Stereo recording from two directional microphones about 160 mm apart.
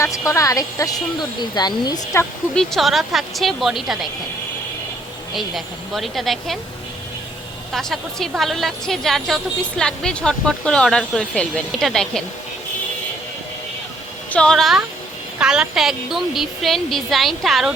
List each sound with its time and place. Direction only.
0.0 s speech: 20° left (ahead or behind)
2.6 s a woman's voice: centre (ahead or behind)
5.3 s a woman's voice: centre (ahead or behind)
7.7 s a woman's voice: centre (ahead or behind)
14.3 s a woman's voice: 5° left (ahead or behind)